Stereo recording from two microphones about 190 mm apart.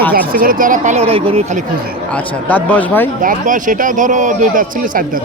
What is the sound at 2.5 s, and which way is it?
Speech, 10° left (ahead or behind).